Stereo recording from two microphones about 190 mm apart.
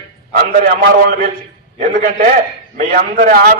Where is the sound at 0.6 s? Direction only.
50° right (ahead or behind).